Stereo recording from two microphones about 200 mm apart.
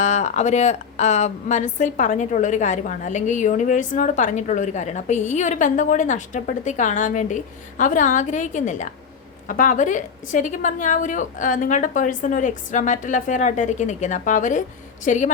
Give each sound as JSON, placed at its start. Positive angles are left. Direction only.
{"t": 0.0, "sound": "speech", "side_deg": 40}